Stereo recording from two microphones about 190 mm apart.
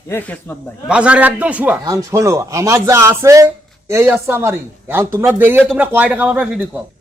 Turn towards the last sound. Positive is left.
turn(degrees=-5)  # may be behind; listen again after turning